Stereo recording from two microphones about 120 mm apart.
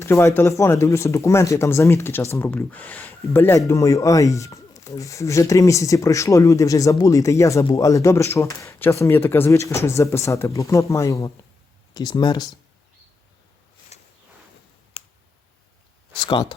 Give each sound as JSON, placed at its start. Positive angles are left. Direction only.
{"t": 0.0, "sound": "speech", "side_deg": 25}
{"t": 13.9, "sound": "a sound", "side_deg": 65}
{"t": 16.2, "sound": "speech", "side_deg": 45}